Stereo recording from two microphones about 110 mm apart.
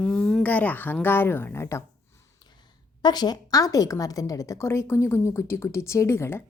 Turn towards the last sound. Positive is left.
turn(degrees=25)  # may be behind; listen again after turning